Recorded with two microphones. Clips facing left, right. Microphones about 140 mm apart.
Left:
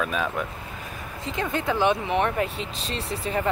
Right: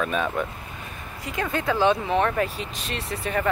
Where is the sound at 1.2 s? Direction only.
20° left (ahead or behind).